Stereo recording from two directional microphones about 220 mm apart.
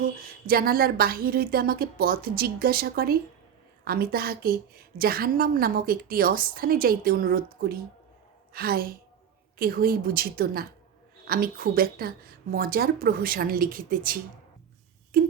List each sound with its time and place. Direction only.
0.4 s a woman's voice: 40° right (ahead or behind)